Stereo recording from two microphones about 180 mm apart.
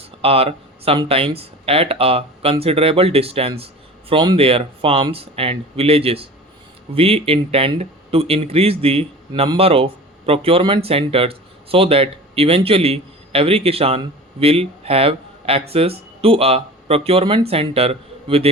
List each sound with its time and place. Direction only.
0.0 s speech: 30° right (ahead or behind)